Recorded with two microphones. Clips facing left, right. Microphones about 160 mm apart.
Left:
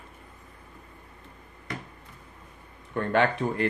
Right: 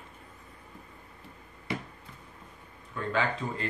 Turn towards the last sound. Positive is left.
turn(degrees=65)  # may be behind; listen again after turning